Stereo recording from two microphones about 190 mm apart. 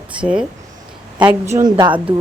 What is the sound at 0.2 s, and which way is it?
Speech, 5° right (ahead or behind).